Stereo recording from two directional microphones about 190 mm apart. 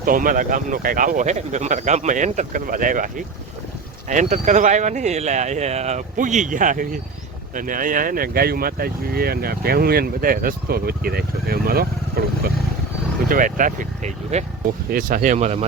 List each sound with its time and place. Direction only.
0.0 s speech: 45° right (ahead or behind)
13.2 s speech: 45° right (ahead or behind)
14.8 s speech: 45° right (ahead or behind)